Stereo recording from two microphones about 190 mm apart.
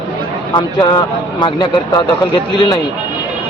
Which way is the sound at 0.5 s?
20° left (ahead or behind).